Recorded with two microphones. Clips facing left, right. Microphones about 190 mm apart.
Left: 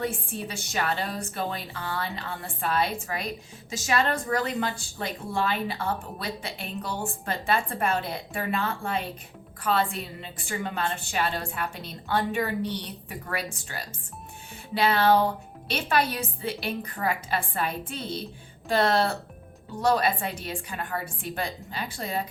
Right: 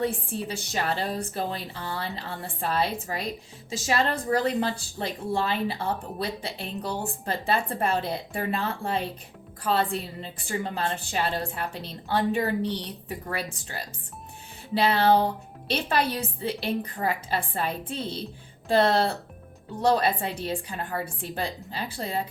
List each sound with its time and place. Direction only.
0.0 s a woman's voice: 35° right (ahead or behind)
14.8 s a woman's voice: 35° right (ahead or behind)